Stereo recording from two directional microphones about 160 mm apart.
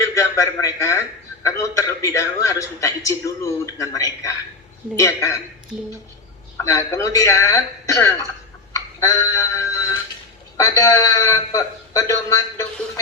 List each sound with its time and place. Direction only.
0.0 s a man's voice: 20° left (ahead or behind)
6.6 s a man's voice: 20° left (ahead or behind)